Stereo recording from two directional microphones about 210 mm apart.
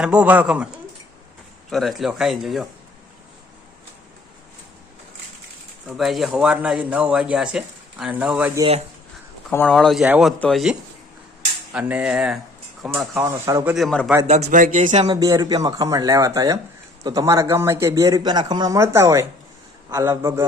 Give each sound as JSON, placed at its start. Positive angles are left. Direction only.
{"t": 0.0, "sound": "speech", "side_deg": -5}
{"t": 1.7, "sound": "speech", "side_deg": 0}
{"t": 6.0, "sound": "speech", "side_deg": 0}
{"t": 9.5, "sound": "a man's voice", "side_deg": 5}
{"t": 13.7, "sound": "speech", "side_deg": 5}
{"t": 14.4, "sound": "speech", "side_deg": -40}
{"t": 15.0, "sound": "a man's voice", "side_deg": -20}